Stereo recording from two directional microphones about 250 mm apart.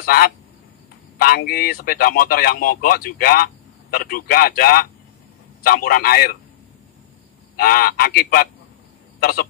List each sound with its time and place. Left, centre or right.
0.0 s a man's voice: left
7.5 s a man's voice: left